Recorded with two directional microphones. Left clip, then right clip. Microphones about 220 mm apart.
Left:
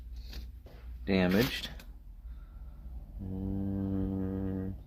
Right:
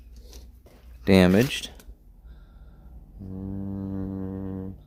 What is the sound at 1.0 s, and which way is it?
Speech, 55° right (ahead or behind).